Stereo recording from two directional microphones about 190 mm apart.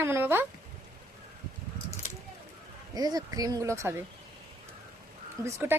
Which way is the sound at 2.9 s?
20° right (ahead or behind).